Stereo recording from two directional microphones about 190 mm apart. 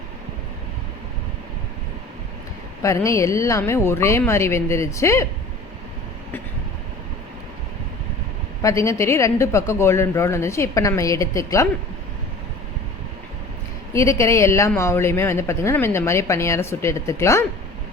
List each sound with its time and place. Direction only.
2.8 s speech: 15° left (ahead or behind)
8.6 s speech: 15° left (ahead or behind)
13.9 s speech: 15° left (ahead or behind)